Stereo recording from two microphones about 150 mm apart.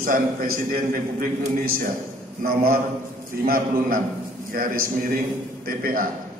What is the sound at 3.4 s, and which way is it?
A man's voice, 75° right (ahead or behind).